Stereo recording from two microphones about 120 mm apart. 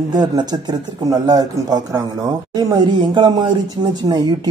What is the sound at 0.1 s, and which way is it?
Speech, 35° right (ahead or behind).